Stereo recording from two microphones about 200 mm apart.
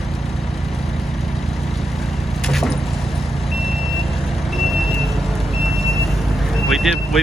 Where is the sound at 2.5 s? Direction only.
Centre (ahead or behind).